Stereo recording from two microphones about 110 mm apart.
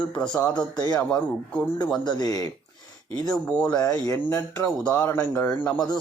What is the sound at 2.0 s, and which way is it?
Speech, 40° left (ahead or behind).